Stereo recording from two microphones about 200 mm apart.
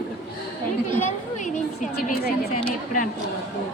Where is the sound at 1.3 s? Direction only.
40° left (ahead or behind).